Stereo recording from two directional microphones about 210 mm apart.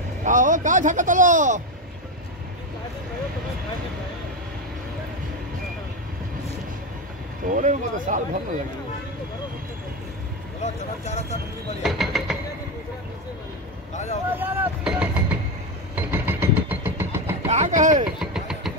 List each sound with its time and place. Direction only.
0.2 s speech: 35° right (ahead or behind)
7.4 s speech: 40° right (ahead or behind)
10.6 s speech: 30° left (ahead or behind)
11.8 s pulleys: centre (ahead or behind)
14.3 s speech: 10° right (ahead or behind)
16.0 s a sound: 10° right (ahead or behind)
17.5 s speech: 35° right (ahead or behind)
18.2 s vehicle: centre (ahead or behind)